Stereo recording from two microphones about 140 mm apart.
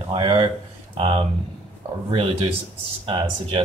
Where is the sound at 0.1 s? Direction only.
40° right (ahead or behind).